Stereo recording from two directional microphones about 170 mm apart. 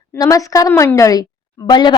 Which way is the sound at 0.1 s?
20° left (ahead or behind).